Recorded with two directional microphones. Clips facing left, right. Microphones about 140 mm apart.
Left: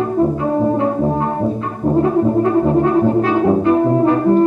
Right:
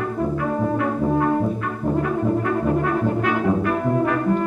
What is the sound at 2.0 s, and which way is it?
Brass instrument, 30° left (ahead or behind).